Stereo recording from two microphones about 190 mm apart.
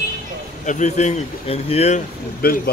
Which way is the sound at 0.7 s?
40° left (ahead or behind).